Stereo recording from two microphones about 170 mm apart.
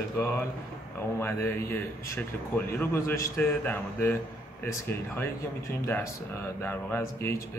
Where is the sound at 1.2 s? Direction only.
15° left (ahead or behind).